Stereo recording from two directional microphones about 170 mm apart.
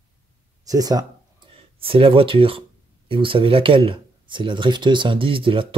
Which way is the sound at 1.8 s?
35° right (ahead or behind).